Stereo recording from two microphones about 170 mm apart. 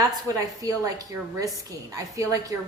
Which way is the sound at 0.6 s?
20° right (ahead or behind).